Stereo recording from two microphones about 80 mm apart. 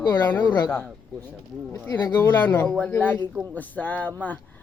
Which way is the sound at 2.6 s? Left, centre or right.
Centre.